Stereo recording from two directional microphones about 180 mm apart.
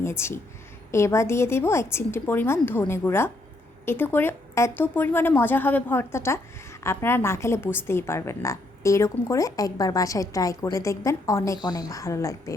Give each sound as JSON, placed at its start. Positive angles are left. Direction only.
{"t": 0.0, "sound": "a woman's voice", "side_deg": 15}